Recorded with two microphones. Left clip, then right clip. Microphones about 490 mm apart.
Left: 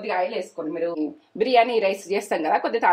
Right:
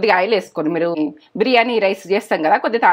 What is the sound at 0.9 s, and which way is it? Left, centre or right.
Speech, right.